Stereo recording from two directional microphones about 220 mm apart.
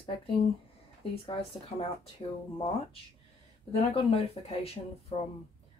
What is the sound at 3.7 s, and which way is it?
Speech, 25° left (ahead or behind).